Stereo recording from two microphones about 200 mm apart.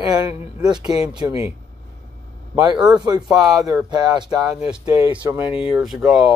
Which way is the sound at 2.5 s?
20° right (ahead or behind).